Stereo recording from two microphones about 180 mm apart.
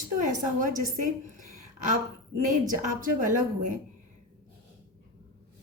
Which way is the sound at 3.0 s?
45° right (ahead or behind).